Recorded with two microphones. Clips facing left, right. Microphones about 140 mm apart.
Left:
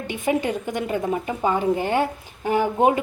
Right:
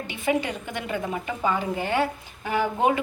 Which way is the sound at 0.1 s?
45° left (ahead or behind).